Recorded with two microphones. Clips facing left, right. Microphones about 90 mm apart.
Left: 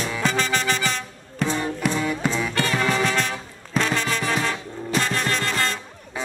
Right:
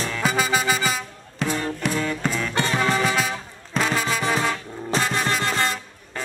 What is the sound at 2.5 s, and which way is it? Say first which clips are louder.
Music: even; 20° right (ahead or behind).